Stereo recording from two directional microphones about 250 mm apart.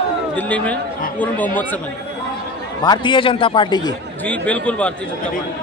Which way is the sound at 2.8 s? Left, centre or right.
Centre.